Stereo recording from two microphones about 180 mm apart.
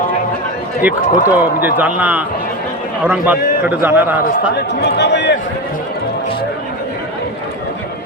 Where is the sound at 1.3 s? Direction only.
10° right (ahead or behind).